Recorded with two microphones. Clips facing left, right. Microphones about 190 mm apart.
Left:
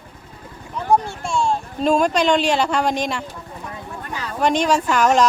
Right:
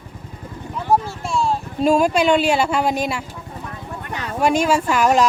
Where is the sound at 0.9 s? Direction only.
Centre (ahead or behind).